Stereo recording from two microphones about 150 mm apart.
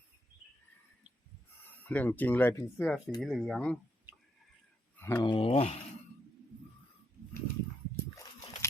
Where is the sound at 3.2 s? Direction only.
Centre (ahead or behind).